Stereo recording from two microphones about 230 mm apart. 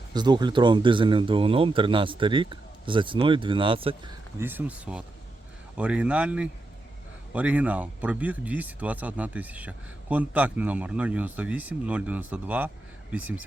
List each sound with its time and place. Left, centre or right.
0.1 s speech: centre
4.4 s speech: centre